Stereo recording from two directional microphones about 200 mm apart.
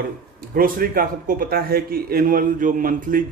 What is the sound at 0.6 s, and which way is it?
A man's voice, 45° right (ahead or behind).